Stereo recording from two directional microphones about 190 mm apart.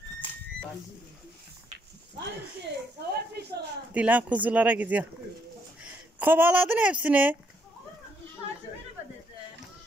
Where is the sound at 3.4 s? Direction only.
60° right (ahead or behind).